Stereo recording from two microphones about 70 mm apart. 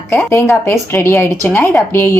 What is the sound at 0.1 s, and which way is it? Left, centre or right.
A woman's voice, left.